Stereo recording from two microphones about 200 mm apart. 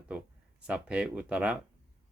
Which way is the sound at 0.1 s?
5° right (ahead or behind).